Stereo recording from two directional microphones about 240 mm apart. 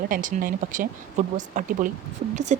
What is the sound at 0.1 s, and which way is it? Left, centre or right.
Speech, right.